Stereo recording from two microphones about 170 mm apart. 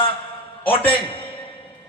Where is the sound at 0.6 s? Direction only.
30° left (ahead or behind).